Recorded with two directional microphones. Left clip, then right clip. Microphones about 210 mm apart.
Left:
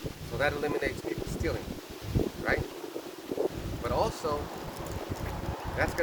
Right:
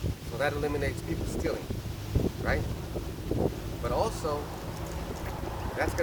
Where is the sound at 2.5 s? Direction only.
15° right (ahead or behind).